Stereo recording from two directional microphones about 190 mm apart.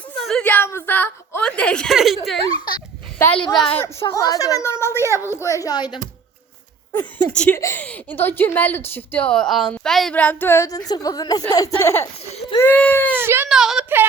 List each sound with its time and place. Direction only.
0.3 s a woman's voice: 5° left (ahead or behind)
2.6 s a sound: 20° left (ahead or behind)
3.5 s a woman's voice: 5° left (ahead or behind); by 5.9 s 20° left (ahead or behind)
6.9 s a woman's voice: 10° left (ahead or behind)
13.1 s a woman's voice: 10° right (ahead or behind)